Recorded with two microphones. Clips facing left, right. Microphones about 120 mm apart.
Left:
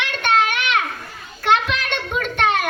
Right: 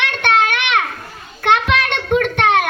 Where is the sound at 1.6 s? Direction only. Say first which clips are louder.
Right 6 dB; 75° right (ahead or behind).